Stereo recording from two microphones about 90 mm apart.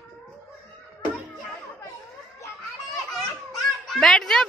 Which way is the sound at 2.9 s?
5° left (ahead or behind).